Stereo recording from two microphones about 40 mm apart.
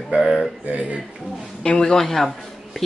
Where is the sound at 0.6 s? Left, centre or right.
Right.